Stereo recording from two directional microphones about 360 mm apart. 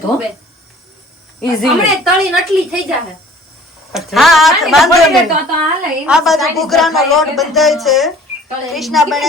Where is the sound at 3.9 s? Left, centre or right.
Centre.